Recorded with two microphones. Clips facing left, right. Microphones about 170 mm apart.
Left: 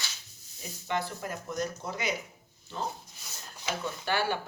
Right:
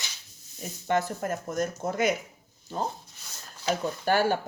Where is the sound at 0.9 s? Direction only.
50° right (ahead or behind).